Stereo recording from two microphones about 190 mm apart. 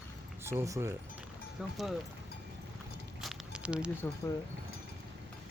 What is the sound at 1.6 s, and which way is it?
Speech, 5° right (ahead or behind).